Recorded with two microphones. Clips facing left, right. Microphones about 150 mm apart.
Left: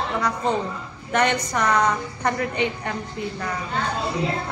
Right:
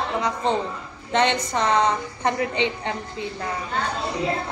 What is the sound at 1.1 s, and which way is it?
A woman's voice, 25° right (ahead or behind).